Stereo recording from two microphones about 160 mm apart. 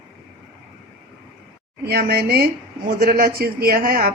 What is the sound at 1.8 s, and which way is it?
Speech, 85° right.